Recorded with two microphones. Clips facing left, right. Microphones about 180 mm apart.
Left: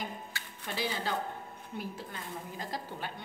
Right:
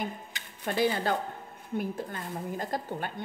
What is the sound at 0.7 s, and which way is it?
A woman's voice, 50° right (ahead or behind).